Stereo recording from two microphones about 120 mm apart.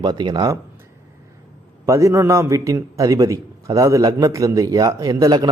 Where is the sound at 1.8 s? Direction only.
25° right (ahead or behind).